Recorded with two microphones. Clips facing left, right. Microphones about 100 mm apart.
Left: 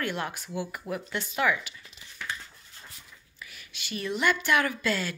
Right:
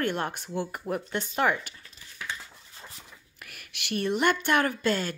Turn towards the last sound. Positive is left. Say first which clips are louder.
# right 2 dB
turn(degrees=-40)  # may be behind; listen again after turning